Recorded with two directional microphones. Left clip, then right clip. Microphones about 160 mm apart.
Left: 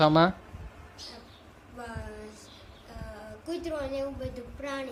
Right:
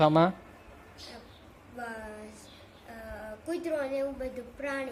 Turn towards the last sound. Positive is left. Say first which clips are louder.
# right 1 dB
turn(degrees=0)  # may be behind; listen again after turning